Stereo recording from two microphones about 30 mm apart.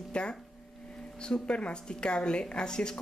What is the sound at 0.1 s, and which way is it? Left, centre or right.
A woman's voice, left.